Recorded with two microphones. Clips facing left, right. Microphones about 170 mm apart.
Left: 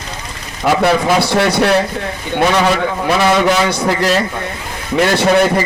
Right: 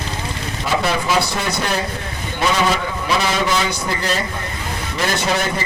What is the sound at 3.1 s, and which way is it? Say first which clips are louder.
A man's voice: left 7 dB; 65° left (ahead or behind).